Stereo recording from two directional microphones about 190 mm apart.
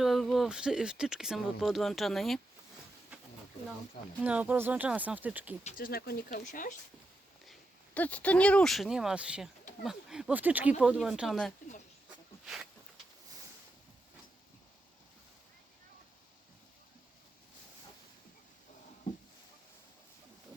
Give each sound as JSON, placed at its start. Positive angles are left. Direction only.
{"t": 0.0, "sound": "speech", "side_deg": 0}
{"t": 4.2, "sound": "speech", "side_deg": -10}
{"t": 5.6, "sound": "speech", "side_deg": 50}
{"t": 7.9, "sound": "speech", "side_deg": 5}